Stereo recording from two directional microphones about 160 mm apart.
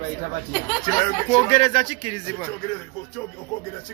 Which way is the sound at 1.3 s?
45° left (ahead or behind).